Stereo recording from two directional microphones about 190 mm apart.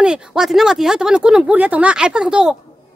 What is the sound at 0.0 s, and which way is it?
Speech, 5° right (ahead or behind).